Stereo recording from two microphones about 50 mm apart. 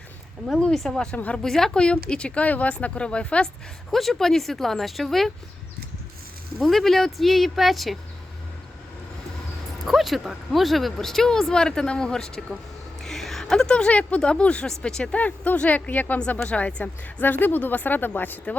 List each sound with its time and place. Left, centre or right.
0.7 s speech: centre
1.1 s speech: left
1.4 s speech: centre
3.9 s speech: centre
6.6 s speech: centre
9.8 s speech: centre
13.0 s a sound: centre
13.4 s a woman's voice: centre
15.1 s speech: left